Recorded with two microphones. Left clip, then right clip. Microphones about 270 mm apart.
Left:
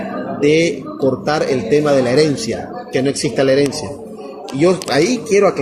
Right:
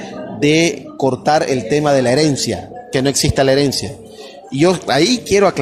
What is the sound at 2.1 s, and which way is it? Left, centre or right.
Speech, right.